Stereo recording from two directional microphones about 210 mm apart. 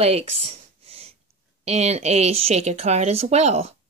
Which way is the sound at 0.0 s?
30° right (ahead or behind).